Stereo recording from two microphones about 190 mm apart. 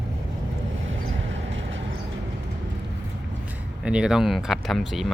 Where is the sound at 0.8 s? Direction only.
80° right.